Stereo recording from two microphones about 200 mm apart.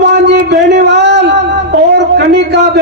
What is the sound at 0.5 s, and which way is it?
A man's voice, 55° right (ahead or behind).